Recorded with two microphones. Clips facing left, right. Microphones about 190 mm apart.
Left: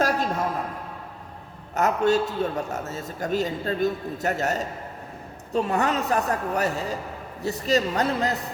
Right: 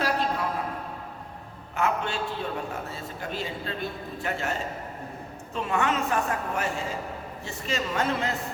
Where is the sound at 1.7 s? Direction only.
40° left (ahead or behind).